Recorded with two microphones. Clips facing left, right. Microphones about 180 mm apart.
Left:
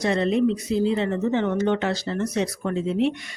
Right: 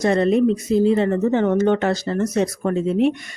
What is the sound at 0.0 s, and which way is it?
Speech, 45° right (ahead or behind).